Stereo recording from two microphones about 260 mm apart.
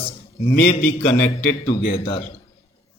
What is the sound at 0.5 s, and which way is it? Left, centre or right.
A man's voice, left.